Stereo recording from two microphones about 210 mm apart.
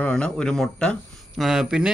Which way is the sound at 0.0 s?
5° left (ahead or behind).